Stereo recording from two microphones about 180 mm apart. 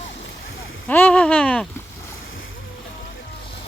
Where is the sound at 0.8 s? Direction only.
10° left (ahead or behind).